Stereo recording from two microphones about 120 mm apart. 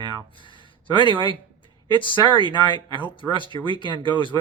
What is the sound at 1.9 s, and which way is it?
Speech, 45° left (ahead or behind).